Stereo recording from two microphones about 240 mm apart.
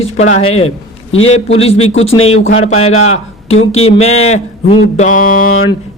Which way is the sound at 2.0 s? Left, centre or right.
Left.